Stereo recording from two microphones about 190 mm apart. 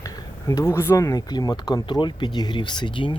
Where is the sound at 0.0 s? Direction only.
15° left (ahead or behind).